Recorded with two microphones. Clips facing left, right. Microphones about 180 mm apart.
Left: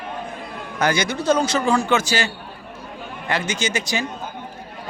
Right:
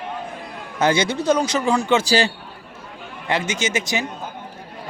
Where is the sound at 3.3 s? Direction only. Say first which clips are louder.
Right 1 dB; 20° right (ahead or behind).